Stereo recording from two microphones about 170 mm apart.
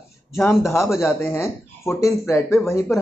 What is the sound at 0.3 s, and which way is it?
Speech, 15° left (ahead or behind).